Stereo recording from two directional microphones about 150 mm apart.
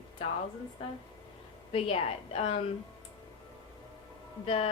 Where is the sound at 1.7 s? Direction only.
40° left (ahead or behind).